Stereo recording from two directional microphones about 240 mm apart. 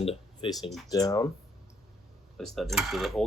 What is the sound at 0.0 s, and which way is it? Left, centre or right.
Speech, left.